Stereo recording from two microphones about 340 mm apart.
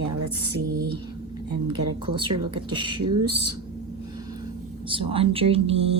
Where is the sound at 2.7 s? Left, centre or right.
Centre.